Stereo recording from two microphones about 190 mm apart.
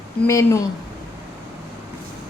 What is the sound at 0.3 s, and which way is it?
Speech, 15° left (ahead or behind).